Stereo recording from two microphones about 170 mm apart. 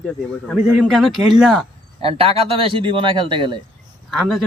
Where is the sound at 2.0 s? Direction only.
35° right (ahead or behind).